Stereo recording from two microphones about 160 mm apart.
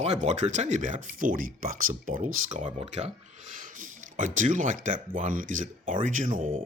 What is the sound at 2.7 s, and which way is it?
Speech, 45° right (ahead or behind).